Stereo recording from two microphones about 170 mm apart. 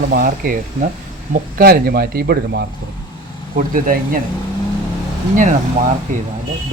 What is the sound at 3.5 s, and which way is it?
Speech, 55° right (ahead or behind).